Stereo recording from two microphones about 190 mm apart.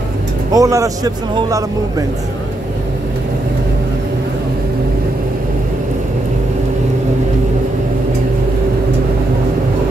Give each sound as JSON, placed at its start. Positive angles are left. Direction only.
{"t": 0.5, "sound": "speech", "side_deg": -15}